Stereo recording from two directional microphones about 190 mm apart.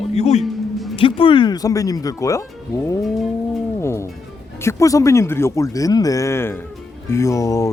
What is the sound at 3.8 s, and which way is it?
Music, 15° left (ahead or behind).